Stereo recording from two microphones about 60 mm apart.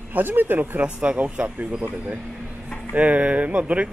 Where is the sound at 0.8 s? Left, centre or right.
Centre.